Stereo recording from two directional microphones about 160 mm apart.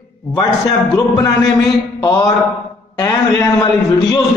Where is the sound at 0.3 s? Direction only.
25° left (ahead or behind).